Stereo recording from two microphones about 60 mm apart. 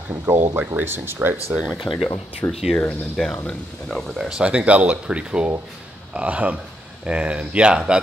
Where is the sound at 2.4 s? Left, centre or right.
Left.